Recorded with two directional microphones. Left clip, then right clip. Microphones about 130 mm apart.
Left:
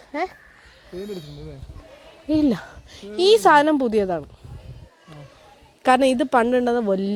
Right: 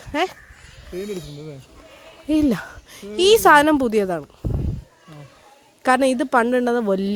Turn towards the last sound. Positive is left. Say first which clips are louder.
# right 1 dB
turn(degrees=-10)  # may be behind; listen again after turning